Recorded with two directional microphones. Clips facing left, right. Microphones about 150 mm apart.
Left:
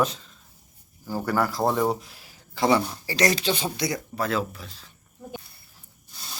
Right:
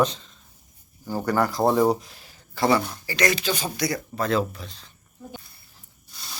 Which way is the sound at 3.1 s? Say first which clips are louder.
Left 1 dB; 35° left (ahead or behind).